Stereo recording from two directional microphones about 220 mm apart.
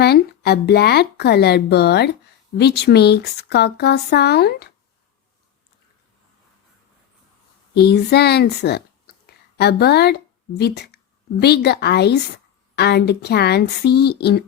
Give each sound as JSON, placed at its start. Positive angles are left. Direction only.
{"t": 0.0, "sound": "speech", "side_deg": 45}
{"t": 7.7, "sound": "a woman's voice", "side_deg": 50}